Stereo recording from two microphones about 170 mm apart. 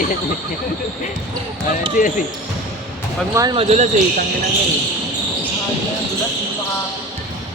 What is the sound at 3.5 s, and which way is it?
Speech, 40° right (ahead or behind).